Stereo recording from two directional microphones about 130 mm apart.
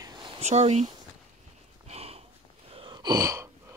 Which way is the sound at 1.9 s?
50° right (ahead or behind).